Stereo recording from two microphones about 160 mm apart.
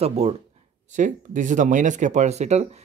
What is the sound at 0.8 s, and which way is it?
Speech, 50° right (ahead or behind).